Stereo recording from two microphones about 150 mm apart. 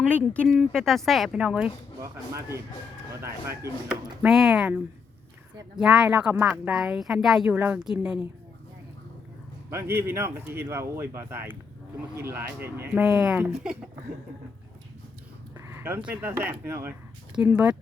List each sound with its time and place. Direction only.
0.0 s speech: 10° left (ahead or behind)
3.2 s speech: 15° right (ahead or behind)
3.8 s speech: 5° right (ahead or behind)
9.6 s speech: 15° right (ahead or behind)
13.0 s speech: 5° right (ahead or behind)
15.5 s dog: 15° right (ahead or behind)
16.0 s speech: 10° right (ahead or behind)